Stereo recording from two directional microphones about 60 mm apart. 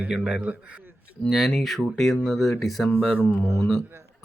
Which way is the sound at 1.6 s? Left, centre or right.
Centre.